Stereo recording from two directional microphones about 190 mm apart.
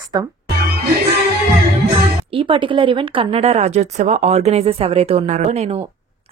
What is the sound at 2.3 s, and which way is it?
Speech, 25° right (ahead or behind).